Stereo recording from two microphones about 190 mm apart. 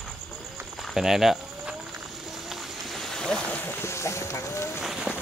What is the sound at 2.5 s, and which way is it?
Boat, centre (ahead or behind).